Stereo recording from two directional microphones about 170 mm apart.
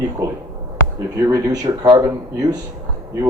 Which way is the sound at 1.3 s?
20° right (ahead or behind).